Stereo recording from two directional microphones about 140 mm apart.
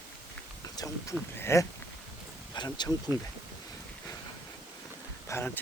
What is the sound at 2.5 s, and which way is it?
Speech, 30° left (ahead or behind).